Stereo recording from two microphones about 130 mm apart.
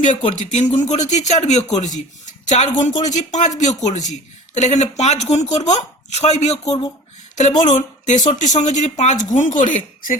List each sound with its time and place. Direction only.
0.3 s a man's voice: 75° left (ahead or behind); by 6.8 s 55° left (ahead or behind)
7.6 s a man's voice: 75° left (ahead or behind)